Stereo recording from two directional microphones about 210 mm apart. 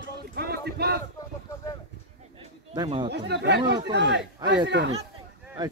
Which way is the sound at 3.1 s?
55° right (ahead or behind).